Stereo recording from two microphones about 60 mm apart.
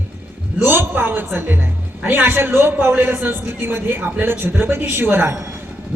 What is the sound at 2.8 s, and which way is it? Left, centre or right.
Speech, right.